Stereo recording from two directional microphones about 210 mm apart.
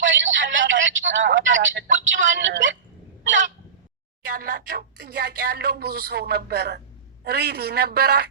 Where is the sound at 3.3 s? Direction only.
35° right (ahead or behind).